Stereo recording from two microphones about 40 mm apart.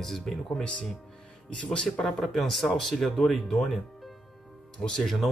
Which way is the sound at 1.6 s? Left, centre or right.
Left.